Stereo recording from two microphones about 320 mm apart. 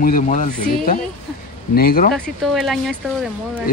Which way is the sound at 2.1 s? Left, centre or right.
Centre.